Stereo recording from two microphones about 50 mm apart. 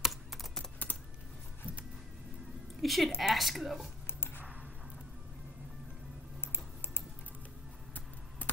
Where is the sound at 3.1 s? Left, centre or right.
Centre.